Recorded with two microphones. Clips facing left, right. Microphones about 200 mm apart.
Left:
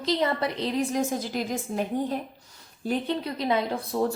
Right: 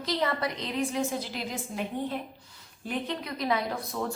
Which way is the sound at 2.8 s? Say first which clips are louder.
Left 5 dB; 30° left (ahead or behind).